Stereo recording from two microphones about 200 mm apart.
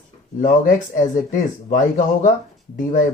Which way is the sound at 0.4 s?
40° left (ahead or behind).